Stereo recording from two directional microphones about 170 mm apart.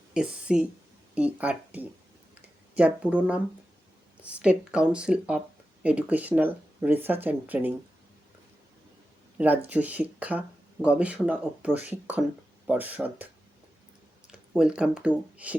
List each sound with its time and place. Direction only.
0.1 s speech: 5° right (ahead or behind)
9.6 s speech: 10° right (ahead or behind)
14.5 s speech: 5° right (ahead or behind)